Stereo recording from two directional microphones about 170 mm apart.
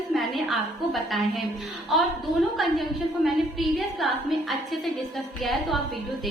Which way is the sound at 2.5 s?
Centre (ahead or behind).